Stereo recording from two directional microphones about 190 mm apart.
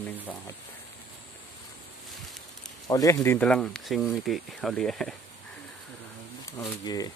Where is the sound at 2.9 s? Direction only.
20° left (ahead or behind); by 5.1 s centre (ahead or behind).